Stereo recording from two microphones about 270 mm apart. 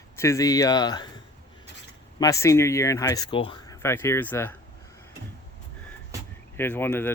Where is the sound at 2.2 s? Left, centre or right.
Centre.